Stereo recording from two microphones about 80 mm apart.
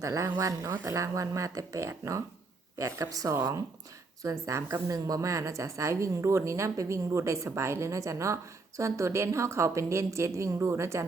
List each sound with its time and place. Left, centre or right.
0.0 s a woman's voice: right
3.3 s a woman's voice: right